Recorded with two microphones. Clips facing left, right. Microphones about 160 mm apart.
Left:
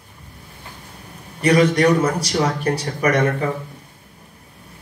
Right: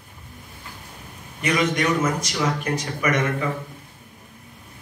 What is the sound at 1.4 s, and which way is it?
Speech, 35° left (ahead or behind).